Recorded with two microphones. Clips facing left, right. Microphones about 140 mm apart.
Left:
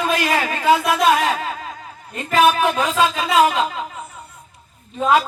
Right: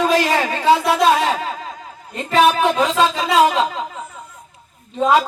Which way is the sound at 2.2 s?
30° right (ahead or behind).